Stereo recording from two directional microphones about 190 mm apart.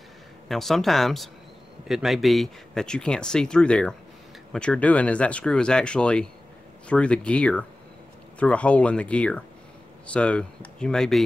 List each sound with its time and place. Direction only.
0.5 s speech: centre (ahead or behind)